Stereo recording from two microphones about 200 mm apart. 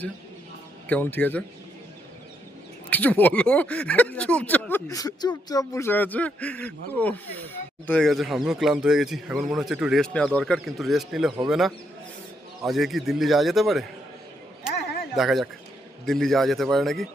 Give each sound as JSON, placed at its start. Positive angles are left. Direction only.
{"t": 0.9, "sound": "speech", "side_deg": 10}
{"t": 2.9, "sound": "speech", "side_deg": 10}
{"t": 14.8, "sound": "a sound", "side_deg": 55}
{"t": 15.1, "sound": "speech", "side_deg": 0}